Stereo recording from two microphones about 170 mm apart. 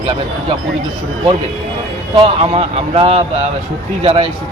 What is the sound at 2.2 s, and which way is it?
Speech, 35° right (ahead or behind).